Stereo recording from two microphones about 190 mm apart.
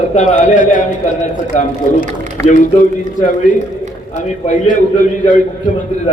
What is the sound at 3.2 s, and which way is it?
Speech, 45° left (ahead or behind).